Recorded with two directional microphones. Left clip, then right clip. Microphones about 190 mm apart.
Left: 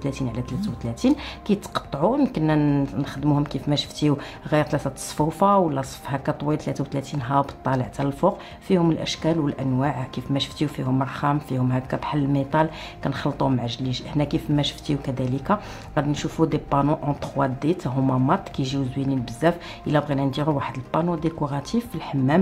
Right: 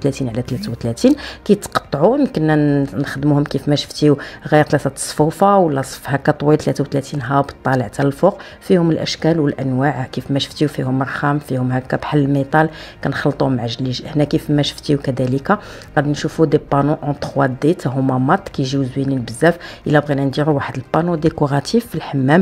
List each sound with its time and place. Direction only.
0.0 s speech: 35° right (ahead or behind)
2.6 s speech: 20° right (ahead or behind)
3.0 s speech: 30° right (ahead or behind)